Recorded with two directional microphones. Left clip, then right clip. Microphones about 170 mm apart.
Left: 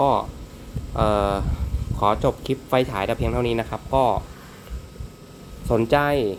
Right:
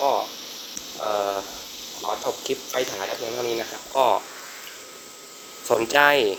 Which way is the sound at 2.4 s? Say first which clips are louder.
Left 4 dB; 15° left (ahead or behind).